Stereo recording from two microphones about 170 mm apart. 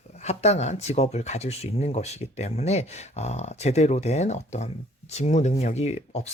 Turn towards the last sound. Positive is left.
turn(degrees=40)  # may be behind; listen again after turning